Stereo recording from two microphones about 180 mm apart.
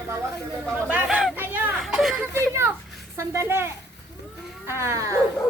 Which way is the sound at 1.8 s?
Centre (ahead or behind).